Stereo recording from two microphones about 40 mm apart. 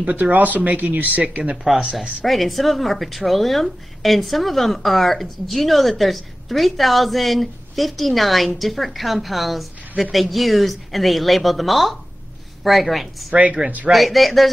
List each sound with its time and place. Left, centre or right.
0.0 s speech: right
1.4 s speech: right
1.9 s speech: centre
13.3 s speech: right
13.9 s speech: centre